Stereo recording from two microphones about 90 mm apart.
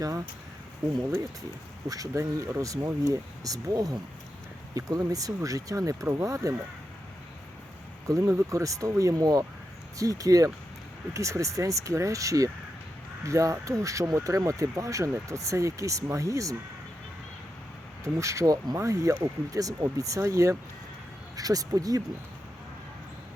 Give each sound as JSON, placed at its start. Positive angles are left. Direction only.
{"t": 1.9, "sound": "speech", "side_deg": -40}
{"t": 8.0, "sound": "speech", "side_deg": -40}
{"t": 18.0, "sound": "speech", "side_deg": -35}